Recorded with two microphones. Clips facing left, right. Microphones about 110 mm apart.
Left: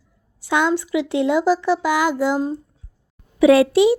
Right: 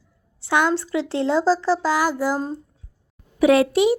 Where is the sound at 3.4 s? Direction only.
30° right (ahead or behind).